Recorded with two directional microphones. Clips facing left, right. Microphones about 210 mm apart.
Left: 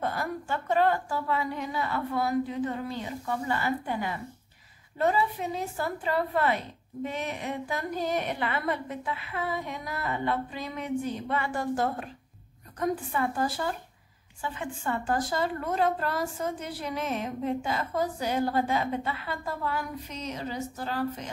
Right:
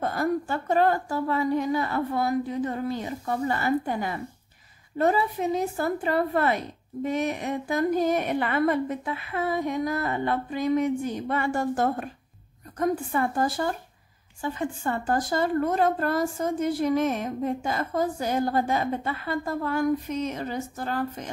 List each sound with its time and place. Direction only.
0.0 s a woman's voice: 45° right (ahead or behind)